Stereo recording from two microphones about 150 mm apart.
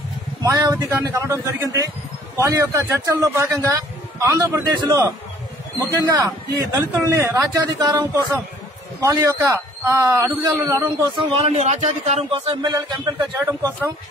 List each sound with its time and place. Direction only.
0.4 s a man's voice: 25° right (ahead or behind)
6.7 s a man's voice: 15° right (ahead or behind)
11.1 s speech: 40° right (ahead or behind)